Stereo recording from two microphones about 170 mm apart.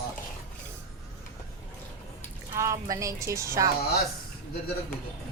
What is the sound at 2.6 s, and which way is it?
Speech, 20° right (ahead or behind).